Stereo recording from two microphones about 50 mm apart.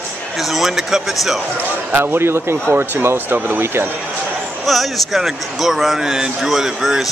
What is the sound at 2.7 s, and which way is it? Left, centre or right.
A man's voice, right.